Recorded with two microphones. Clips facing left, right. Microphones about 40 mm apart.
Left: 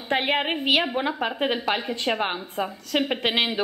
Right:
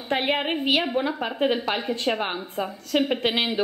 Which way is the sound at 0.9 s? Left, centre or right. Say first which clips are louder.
Even; centre.